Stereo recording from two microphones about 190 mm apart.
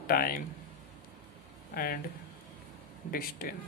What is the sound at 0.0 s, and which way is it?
Speech, 50° left (ahead or behind).